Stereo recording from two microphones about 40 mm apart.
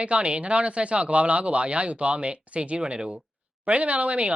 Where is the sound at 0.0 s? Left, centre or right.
Right.